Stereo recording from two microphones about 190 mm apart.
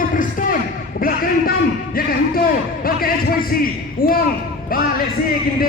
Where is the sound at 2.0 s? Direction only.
50° left (ahead or behind).